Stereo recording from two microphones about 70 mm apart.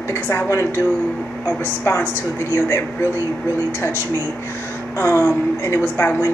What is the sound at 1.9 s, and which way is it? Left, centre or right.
A woman's voice, left.